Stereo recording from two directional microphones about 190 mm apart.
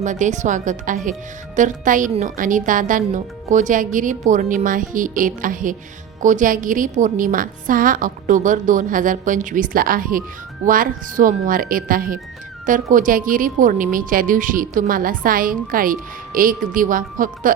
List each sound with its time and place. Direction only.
0.0 s a woman's voice: 40° right (ahead or behind)